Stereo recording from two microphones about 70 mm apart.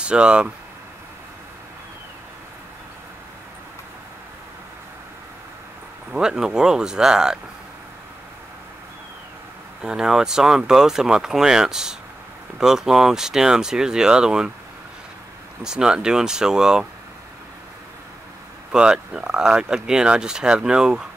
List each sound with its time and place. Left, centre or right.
0.0 s speech: centre
6.1 s speech: centre
9.8 s speech: centre
15.6 s speech: centre
18.7 s speech: centre